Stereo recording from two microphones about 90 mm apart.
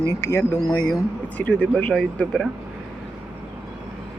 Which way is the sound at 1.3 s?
15° left (ahead or behind).